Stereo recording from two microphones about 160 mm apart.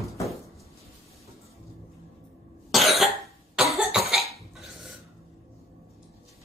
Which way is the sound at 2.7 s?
Centre (ahead or behind).